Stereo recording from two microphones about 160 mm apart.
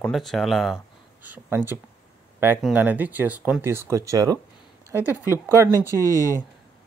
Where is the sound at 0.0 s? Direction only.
Centre (ahead or behind).